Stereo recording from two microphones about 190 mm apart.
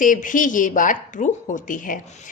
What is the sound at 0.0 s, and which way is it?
Speech, 45° left (ahead or behind).